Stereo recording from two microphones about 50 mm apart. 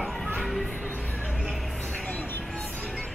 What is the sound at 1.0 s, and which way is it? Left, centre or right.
Music, left.